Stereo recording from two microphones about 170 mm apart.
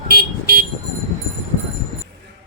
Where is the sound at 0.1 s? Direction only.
65° right (ahead or behind).